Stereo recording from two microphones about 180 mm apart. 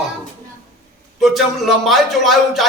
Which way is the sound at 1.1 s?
Centre (ahead or behind).